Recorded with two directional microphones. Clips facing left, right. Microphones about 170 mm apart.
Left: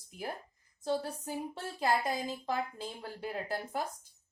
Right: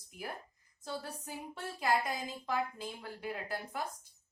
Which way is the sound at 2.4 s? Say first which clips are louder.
Left 1 dB; 30° left (ahead or behind).